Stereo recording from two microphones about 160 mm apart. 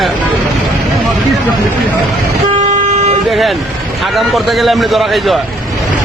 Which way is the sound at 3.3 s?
Centre (ahead or behind).